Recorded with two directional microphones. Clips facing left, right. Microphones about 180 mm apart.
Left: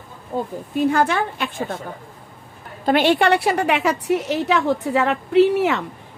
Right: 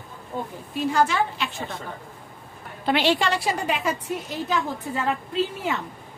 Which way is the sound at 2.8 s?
50° left (ahead or behind).